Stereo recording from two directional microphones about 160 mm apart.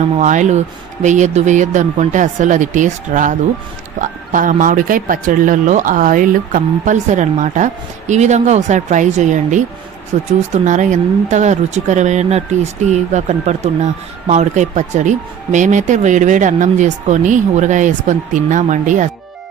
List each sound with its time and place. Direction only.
0.2 s speech: 50° right (ahead or behind)